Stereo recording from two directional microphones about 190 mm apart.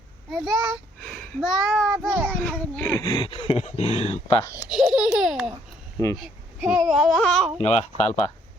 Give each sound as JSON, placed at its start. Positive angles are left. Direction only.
{"t": 0.3, "sound": "a child's voice", "side_deg": 0}
{"t": 2.3, "sound": "a child's voice", "side_deg": 5}
{"t": 3.0, "sound": "speech", "side_deg": 25}
{"t": 4.5, "sound": "babbling", "side_deg": 0}
{"t": 6.7, "sound": "a child's voice", "side_deg": 0}
{"t": 7.6, "sound": "speech", "side_deg": 35}